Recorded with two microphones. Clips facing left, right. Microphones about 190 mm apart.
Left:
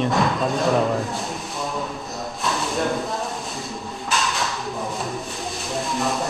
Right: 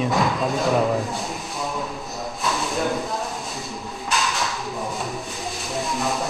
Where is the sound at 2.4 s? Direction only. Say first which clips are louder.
Left 1 dB; centre (ahead or behind).